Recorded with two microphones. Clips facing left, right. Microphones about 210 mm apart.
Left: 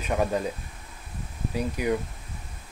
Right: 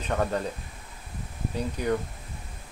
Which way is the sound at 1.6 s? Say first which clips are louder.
Left 1 dB; 10° left (ahead or behind).